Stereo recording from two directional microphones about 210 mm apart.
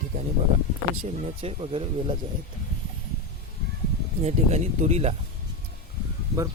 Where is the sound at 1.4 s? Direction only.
25° right (ahead or behind).